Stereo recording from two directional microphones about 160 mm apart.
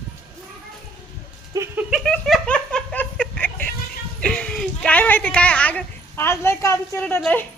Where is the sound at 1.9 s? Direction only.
Centre (ahead or behind).